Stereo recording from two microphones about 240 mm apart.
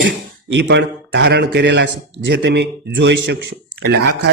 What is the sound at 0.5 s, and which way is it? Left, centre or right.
A man's voice, right.